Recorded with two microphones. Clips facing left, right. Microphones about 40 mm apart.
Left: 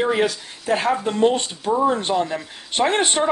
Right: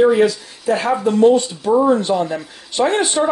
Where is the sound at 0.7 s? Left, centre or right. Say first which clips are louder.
Right 4 dB; left.